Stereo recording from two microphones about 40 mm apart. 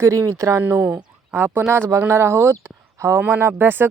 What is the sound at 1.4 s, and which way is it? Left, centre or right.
Speech, right.